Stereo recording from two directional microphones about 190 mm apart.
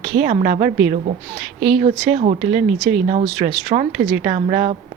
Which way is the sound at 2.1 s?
40° right (ahead or behind).